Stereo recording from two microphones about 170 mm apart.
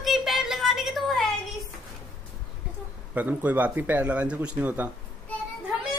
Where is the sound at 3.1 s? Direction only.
10° right (ahead or behind).